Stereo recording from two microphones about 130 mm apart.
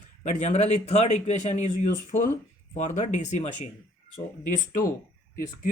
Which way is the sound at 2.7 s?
70° left (ahead or behind).